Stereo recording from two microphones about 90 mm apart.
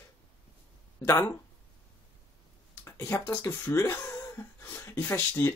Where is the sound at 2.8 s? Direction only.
30° left (ahead or behind).